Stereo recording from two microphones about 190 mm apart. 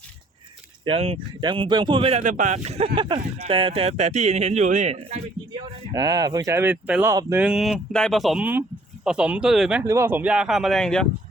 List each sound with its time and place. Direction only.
0.9 s speech: 30° right (ahead or behind)
5.9 s speech: 20° right (ahead or behind); by 9.8 s 5° right (ahead or behind)
9.8 s speech: 15° right (ahead or behind); by 11.1 s 5° left (ahead or behind)